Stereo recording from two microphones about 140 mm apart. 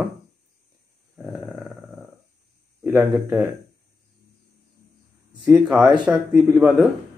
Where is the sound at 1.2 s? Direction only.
10° right (ahead or behind).